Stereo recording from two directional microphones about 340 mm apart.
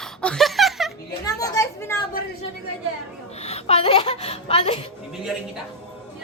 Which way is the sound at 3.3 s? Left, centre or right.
Centre.